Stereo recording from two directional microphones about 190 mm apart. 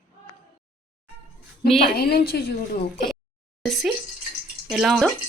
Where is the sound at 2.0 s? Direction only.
55° left (ahead or behind).